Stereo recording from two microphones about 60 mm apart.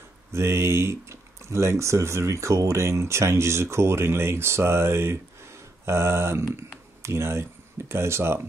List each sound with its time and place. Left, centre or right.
0.3 s speech: right